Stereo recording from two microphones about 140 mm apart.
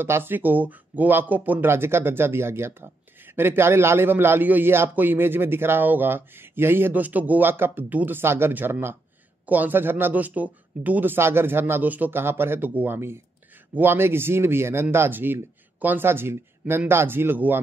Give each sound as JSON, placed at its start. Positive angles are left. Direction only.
{"t": 0.0, "sound": "speech", "side_deg": -15}